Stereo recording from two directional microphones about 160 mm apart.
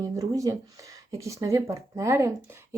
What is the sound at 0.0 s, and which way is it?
Speech, 20° right (ahead or behind).